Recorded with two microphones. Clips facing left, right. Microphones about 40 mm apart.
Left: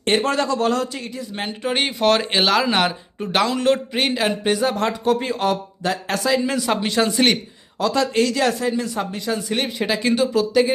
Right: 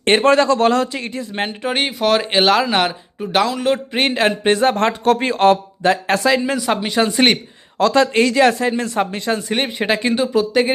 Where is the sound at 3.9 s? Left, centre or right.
Right.